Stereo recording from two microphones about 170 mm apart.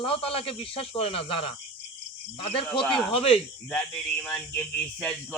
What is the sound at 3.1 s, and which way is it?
Speech, 35° left (ahead or behind).